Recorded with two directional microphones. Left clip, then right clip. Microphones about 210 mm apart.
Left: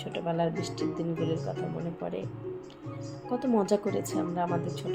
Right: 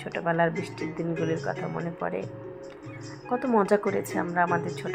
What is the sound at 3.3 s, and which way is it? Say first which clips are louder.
Speech: right 4 dB; centre (ahead or behind).